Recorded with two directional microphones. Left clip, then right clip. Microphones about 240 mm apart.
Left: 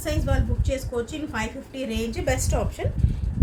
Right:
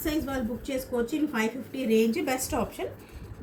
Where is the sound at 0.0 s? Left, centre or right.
Left.